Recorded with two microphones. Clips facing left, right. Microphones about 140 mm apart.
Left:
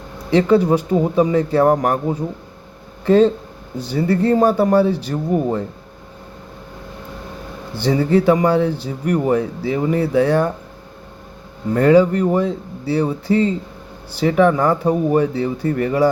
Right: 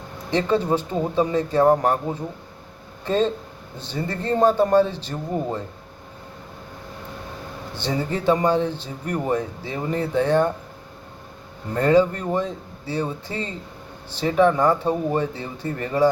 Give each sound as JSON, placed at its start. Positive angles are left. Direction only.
{"t": 0.3, "sound": "a man's voice", "side_deg": 10}
{"t": 3.1, "sound": "a man's voice", "side_deg": 10}
{"t": 7.7, "sound": "a man's voice", "side_deg": 10}
{"t": 11.8, "sound": "a man's voice", "side_deg": 15}